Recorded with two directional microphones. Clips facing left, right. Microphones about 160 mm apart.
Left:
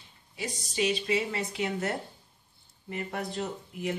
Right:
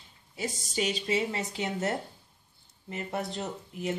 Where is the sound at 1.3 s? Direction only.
30° right (ahead or behind).